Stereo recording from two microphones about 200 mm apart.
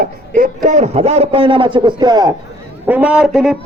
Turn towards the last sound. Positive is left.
turn(degrees=0)  # may be behind; listen again after turning